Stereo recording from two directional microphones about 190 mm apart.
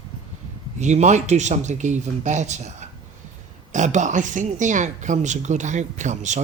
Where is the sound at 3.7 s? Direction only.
40° right (ahead or behind).